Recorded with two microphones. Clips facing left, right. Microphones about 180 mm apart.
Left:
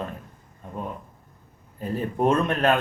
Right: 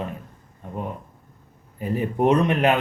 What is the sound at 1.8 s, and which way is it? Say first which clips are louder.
Speech: right 2 dB; 15° right (ahead or behind).